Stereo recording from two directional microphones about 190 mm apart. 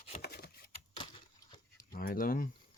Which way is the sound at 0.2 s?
55° left (ahead or behind).